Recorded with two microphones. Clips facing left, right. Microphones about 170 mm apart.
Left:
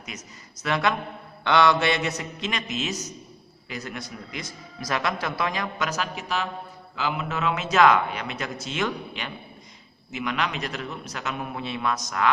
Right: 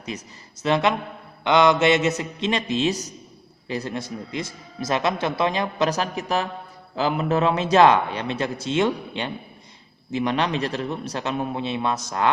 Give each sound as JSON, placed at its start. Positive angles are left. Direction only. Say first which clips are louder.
{"t": 0.1, "sound": "a man's voice", "louder": "right 6 dB", "side_deg": -30}